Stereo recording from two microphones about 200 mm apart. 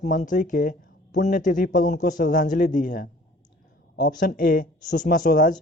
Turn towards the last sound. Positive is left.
turn(degrees=40)  # may be behind; listen again after turning